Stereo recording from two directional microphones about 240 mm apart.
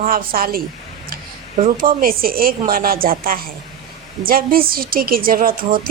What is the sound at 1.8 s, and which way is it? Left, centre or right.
A woman's voice, right.